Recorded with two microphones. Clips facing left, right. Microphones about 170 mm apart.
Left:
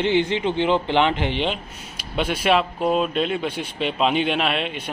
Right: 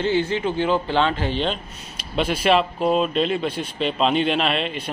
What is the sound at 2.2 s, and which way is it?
Speech, centre (ahead or behind).